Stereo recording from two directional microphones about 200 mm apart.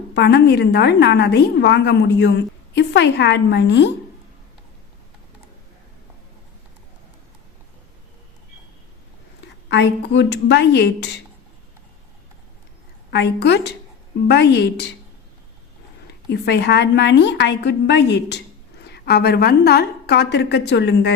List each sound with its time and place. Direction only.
0.1 s a woman's voice: 55° left (ahead or behind)
9.6 s a woman's voice: 65° left (ahead or behind)
13.1 s a woman's voice: 55° left (ahead or behind)
16.3 s a woman's voice: 55° left (ahead or behind)